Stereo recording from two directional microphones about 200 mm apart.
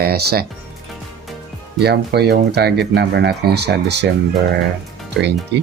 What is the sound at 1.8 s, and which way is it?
Speech, 55° right (ahead or behind).